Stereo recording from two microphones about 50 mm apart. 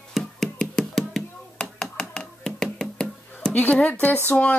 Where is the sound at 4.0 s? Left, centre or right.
Left.